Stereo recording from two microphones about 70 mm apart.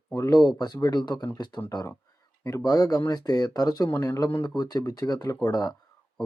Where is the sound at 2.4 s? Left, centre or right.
Left.